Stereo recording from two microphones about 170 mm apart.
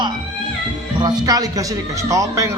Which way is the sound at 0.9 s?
25° right (ahead or behind).